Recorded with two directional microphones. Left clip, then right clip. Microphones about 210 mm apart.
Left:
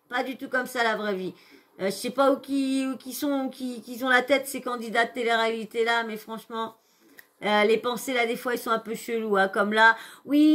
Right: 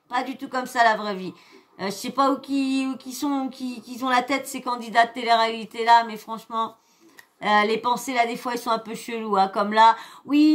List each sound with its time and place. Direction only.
0.3 s speech: 5° right (ahead or behind)
3.5 s speech: 75° right (ahead or behind)
3.9 s speech: centre (ahead or behind)